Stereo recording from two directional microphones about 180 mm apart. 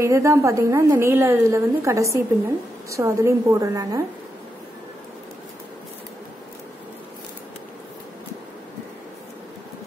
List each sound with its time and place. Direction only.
0.0 s a woman's voice: 15° right (ahead or behind)